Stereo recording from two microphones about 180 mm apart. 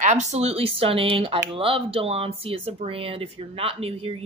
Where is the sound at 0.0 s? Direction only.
40° right (ahead or behind).